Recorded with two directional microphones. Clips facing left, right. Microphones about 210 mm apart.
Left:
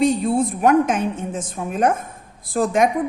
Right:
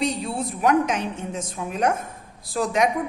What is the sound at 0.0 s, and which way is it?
A woman's voice, 50° left (ahead or behind).